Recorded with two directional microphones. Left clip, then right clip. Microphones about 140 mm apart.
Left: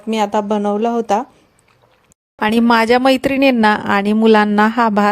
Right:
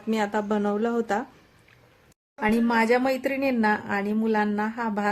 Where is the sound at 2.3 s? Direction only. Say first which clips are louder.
Left 10 dB; 90° left.